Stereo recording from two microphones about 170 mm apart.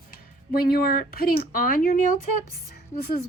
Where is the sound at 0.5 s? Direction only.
60° left (ahead or behind).